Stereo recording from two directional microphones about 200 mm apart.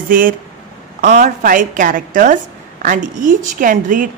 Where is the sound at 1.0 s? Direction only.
45° right (ahead or behind).